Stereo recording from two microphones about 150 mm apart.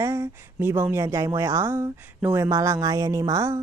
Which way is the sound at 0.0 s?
15° right (ahead or behind).